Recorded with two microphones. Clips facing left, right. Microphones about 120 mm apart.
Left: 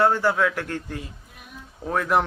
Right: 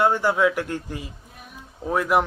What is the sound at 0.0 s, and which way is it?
Speech, 15° right (ahead or behind).